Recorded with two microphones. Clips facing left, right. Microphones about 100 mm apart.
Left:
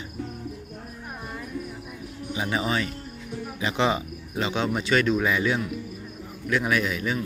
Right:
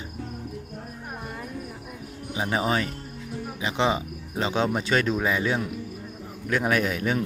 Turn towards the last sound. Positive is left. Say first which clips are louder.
# right 1 dB
turn(degrees=-50)  # may be behind; listen again after turning